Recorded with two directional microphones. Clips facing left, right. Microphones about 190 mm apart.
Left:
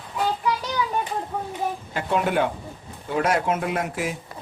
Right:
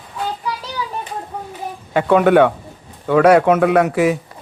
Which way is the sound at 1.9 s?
70° right (ahead or behind).